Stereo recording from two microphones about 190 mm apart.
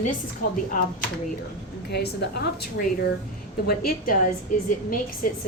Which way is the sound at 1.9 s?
60° left (ahead or behind).